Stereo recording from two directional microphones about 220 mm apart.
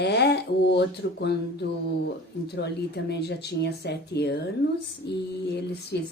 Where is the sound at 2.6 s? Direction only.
50° left (ahead or behind).